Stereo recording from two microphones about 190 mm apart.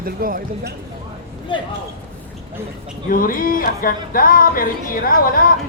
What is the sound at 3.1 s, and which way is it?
Music, 50° left (ahead or behind).